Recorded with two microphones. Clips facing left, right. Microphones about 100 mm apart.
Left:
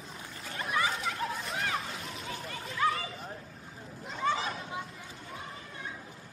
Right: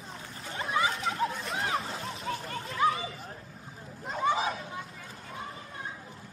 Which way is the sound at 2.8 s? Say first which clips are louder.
Right 3 dB; 20° right (ahead or behind).